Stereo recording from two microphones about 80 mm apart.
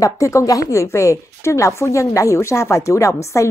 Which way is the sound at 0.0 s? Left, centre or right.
Left.